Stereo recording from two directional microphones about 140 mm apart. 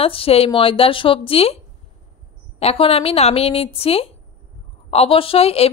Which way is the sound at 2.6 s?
45° left (ahead or behind).